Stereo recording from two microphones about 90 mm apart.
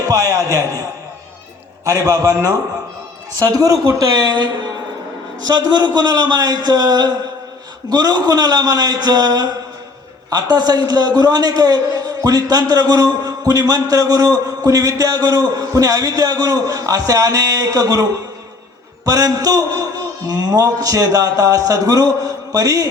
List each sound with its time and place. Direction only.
0.1 s a man's voice: 45° right (ahead or behind)
5.5 s a man's voice: 50° right (ahead or behind)
19.0 s a man's voice: 40° right (ahead or behind)